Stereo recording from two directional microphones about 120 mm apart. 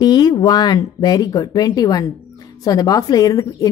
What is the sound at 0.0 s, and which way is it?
A woman's voice, 35° left (ahead or behind).